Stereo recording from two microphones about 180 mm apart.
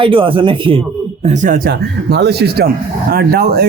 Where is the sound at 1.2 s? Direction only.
40° right (ahead or behind).